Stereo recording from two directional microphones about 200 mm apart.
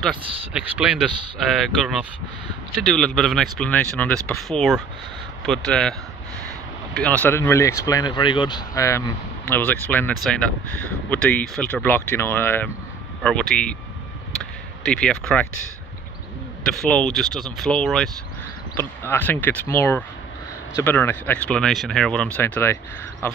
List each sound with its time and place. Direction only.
0.5 s speech: 5° right (ahead or behind)
2.8 s speech: 5° left (ahead or behind)
14.9 s speech: 5° left (ahead or behind)
16.6 s speech: 5° left (ahead or behind)